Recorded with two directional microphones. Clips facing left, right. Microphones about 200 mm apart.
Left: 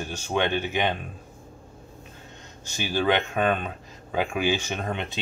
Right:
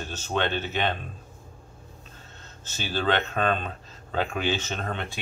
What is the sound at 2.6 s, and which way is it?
Speech, 15° left (ahead or behind).